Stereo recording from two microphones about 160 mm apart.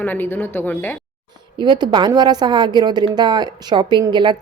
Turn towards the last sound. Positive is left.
turn(degrees=-30)  # may be behind; listen again after turning